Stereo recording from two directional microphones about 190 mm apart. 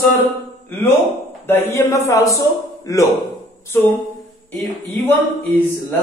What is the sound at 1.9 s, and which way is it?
A man's voice, 15° left (ahead or behind).